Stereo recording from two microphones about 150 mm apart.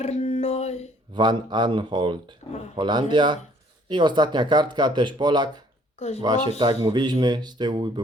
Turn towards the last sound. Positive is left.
turn(degrees=-30)  # may be behind; listen again after turning